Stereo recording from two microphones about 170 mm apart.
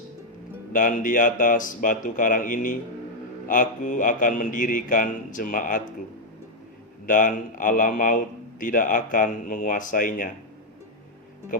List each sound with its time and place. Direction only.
0.7 s a man's voice: 50° left (ahead or behind)
7.1 s a man's voice: 50° left (ahead or behind)